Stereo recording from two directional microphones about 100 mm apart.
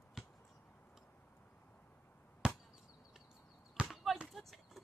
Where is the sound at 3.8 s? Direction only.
10° right (ahead or behind).